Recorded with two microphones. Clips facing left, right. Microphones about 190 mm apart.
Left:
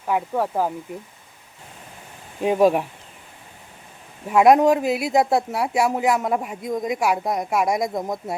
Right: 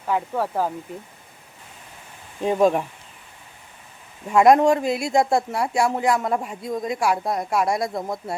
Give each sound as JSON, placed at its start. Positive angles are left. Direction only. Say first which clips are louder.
{"t": 0.1, "sound": "speech", "louder": "left 1 dB", "side_deg": 15}
{"t": 2.4, "sound": "speech", "louder": "left 1 dB", "side_deg": 10}
{"t": 4.3, "sound": "speech", "louder": "even", "side_deg": 5}